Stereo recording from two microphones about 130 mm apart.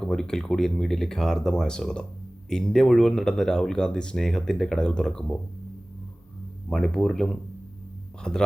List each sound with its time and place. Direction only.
0.0 s speech: 5° left (ahead or behind)
6.7 s speech: 5° left (ahead or behind)